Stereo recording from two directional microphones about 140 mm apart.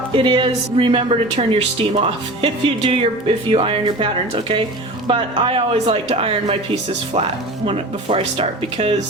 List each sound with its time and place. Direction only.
0.1 s speech: 35° right (ahead or behind)